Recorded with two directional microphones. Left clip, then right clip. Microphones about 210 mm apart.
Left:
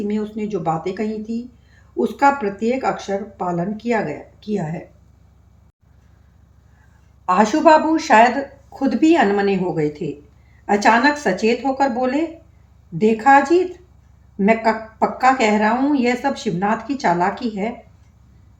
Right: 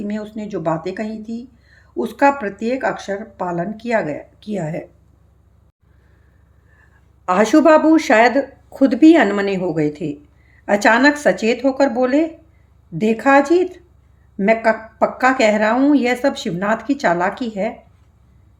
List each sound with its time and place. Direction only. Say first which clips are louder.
0.1 s a woman's voice: left 2 dB; 50° right (ahead or behind)
7.3 s a woman's voice: right 1 dB; 55° right (ahead or behind)